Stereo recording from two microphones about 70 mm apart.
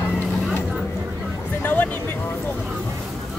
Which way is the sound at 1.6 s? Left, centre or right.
Left.